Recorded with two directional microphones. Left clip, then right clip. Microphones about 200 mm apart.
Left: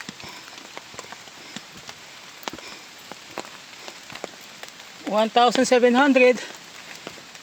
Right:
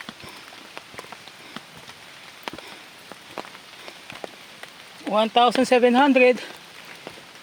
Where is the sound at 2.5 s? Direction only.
5° left (ahead or behind).